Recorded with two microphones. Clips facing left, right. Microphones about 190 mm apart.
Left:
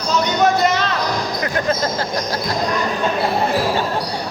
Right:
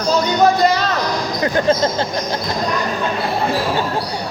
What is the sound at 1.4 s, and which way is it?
Speech, 30° right (ahead or behind).